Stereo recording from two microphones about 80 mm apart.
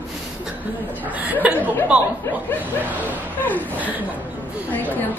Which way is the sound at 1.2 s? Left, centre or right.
Right.